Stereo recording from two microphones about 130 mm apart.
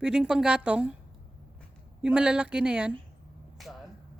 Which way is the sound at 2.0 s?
5° right (ahead or behind).